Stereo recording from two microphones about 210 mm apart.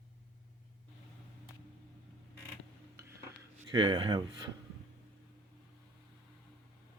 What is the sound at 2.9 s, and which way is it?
Dishes, 15° right (ahead or behind).